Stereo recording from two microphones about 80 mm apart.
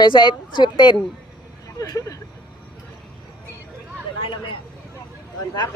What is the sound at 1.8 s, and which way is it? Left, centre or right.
Speech, left.